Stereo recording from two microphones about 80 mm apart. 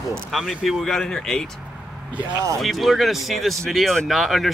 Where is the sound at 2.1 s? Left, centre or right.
Centre.